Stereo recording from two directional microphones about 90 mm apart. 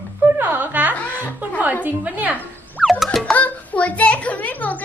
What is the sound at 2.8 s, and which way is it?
Music, centre (ahead or behind).